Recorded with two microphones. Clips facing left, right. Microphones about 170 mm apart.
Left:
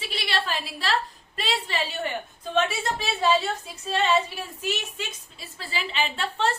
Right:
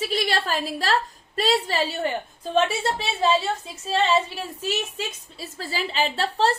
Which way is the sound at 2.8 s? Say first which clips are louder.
Right 2 dB; 30° right (ahead or behind).